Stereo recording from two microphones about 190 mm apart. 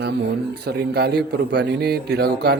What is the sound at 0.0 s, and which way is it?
A man's voice, 60° right (ahead or behind).